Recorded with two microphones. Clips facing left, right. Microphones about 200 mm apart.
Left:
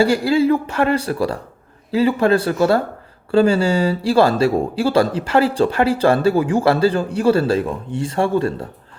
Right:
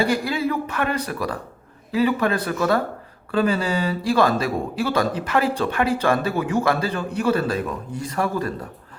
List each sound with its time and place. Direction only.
0.0 s speech: 30° left (ahead or behind)